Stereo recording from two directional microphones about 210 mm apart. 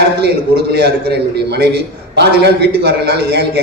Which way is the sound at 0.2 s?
50° right (ahead or behind).